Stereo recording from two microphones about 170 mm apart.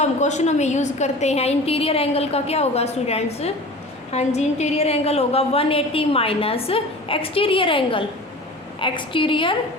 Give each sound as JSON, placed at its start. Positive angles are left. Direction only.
{"t": 0.0, "sound": "a woman's voice", "side_deg": 45}